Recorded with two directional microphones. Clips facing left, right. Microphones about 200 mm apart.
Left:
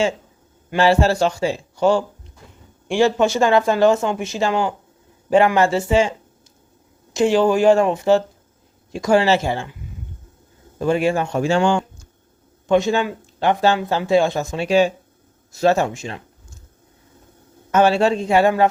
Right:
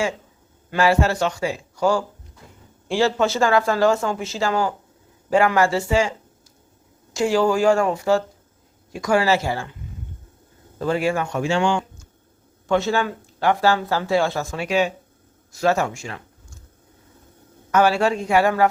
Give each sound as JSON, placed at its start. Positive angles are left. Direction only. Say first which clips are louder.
{"t": 0.8, "sound": "speech", "louder": "left 3 dB", "side_deg": 30}
{"t": 10.8, "sound": "speech", "louder": "left 3 dB", "side_deg": 15}
{"t": 12.6, "sound": "speech", "louder": "left 3 dB", "side_deg": 15}
{"t": 17.7, "sound": "speech", "louder": "left 2 dB", "side_deg": 25}